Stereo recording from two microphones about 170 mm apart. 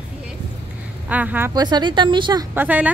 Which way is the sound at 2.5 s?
10° right (ahead or behind).